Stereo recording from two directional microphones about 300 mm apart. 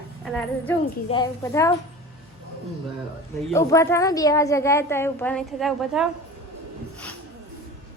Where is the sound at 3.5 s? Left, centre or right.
Centre.